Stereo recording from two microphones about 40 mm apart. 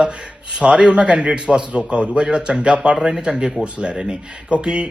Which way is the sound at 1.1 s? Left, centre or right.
Right.